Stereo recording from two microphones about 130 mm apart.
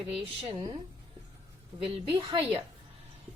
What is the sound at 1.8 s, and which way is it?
Speech, 45° right (ahead or behind).